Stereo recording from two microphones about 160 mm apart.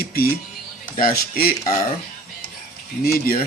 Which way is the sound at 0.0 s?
70° left (ahead or behind).